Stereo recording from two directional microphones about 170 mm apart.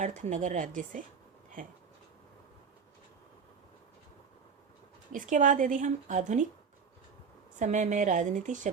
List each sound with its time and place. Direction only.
0.0 s a woman's voice: 45° right (ahead or behind)
5.1 s a woman's voice: 50° right (ahead or behind)
7.6 s a woman's voice: 45° right (ahead or behind)